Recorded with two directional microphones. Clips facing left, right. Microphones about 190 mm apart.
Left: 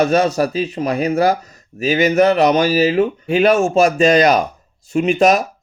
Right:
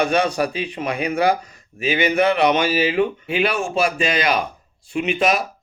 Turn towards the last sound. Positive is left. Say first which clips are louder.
# left 6 dB
turn(degrees=40)  # may be behind; listen again after turning